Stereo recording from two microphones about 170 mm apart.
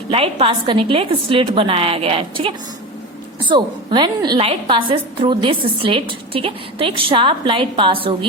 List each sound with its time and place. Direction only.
0.1 s a woman's voice: 35° right (ahead or behind)